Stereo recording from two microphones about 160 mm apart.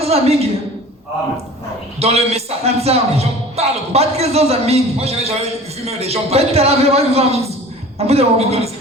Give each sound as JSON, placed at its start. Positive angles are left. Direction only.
{"t": 0.0, "sound": "a woman's voice", "side_deg": -40}
{"t": 2.0, "sound": "a man's voice", "side_deg": -40}